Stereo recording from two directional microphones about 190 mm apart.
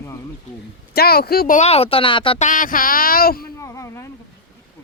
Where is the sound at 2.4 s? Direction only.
45° left (ahead or behind).